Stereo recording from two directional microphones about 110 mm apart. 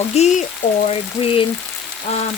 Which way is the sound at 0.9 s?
60° left (ahead or behind).